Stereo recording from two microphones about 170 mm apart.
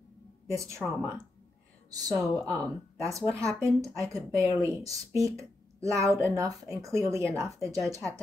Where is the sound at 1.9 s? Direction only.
20° right (ahead or behind).